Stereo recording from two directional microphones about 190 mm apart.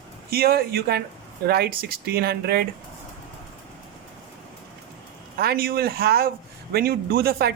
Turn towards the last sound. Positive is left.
turn(degrees=-55)  # may be behind; listen again after turning